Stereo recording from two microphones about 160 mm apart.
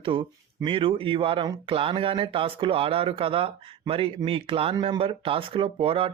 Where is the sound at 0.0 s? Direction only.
30° right (ahead or behind).